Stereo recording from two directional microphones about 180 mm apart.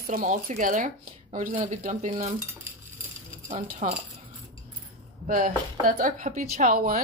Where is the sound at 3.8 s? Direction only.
40° right (ahead or behind).